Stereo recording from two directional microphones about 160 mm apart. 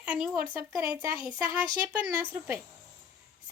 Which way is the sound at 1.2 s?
30° left (ahead or behind).